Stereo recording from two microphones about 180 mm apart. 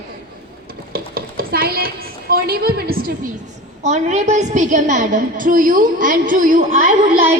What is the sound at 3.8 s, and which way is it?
A woman's voice, 40° right (ahead or behind).